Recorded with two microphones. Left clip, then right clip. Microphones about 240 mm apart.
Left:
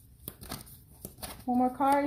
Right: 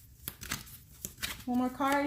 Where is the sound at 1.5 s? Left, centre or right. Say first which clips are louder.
Left 5 dB; right.